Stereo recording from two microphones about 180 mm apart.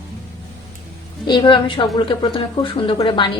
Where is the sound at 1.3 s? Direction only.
25° left (ahead or behind).